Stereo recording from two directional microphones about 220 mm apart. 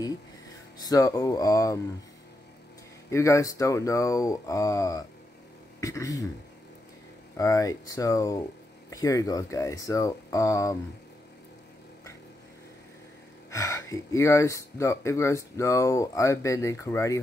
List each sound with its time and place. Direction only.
0.7 s speech: 15° left (ahead or behind)
3.1 s speech: 15° left (ahead or behind)
7.3 s speech: 15° left (ahead or behind)
13.5 s speech: 15° left (ahead or behind)